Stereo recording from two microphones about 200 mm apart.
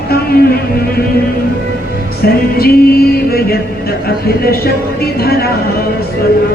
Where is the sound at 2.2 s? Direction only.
50° left (ahead or behind).